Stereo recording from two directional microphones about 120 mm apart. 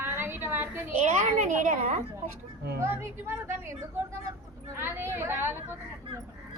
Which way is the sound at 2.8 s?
20° right (ahead or behind).